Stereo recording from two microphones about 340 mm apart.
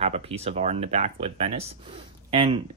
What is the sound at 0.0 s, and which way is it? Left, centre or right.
Speech, centre.